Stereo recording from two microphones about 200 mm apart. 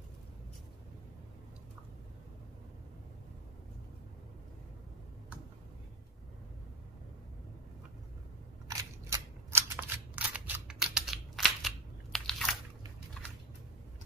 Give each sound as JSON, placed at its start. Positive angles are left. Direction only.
{"t": 8.6, "sound": "scissors", "side_deg": -15}